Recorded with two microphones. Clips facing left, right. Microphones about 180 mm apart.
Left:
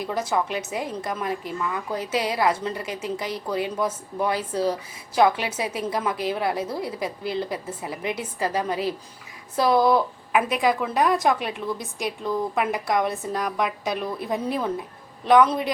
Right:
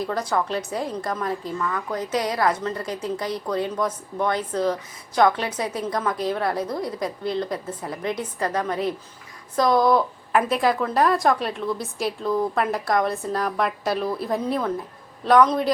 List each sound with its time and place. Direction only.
0.2 s a woman's voice: 25° left (ahead or behind)
2.1 s a woman's voice: 25° left (ahead or behind)
2.6 s a woman's voice: 10° left (ahead or behind)